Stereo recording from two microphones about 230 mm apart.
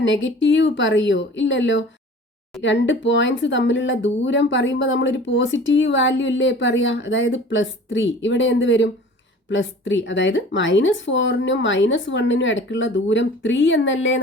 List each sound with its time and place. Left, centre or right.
0.0 s speech: left